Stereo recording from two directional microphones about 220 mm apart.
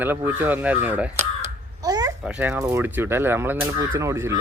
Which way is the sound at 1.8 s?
15° right (ahead or behind).